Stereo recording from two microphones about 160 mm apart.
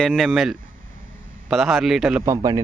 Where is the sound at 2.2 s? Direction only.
20° right (ahead or behind).